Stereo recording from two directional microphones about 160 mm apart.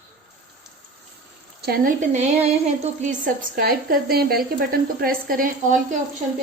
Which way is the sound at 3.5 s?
70° right (ahead or behind).